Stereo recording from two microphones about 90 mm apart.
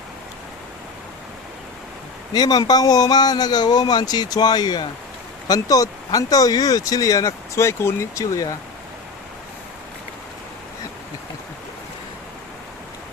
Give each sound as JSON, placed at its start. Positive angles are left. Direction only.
{"t": 2.3, "sound": "speech", "side_deg": 50}
{"t": 5.5, "sound": "speech", "side_deg": 40}